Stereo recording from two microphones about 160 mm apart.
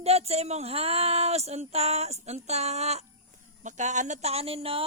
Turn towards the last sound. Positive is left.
turn(degrees=-35)  # may be behind; listen again after turning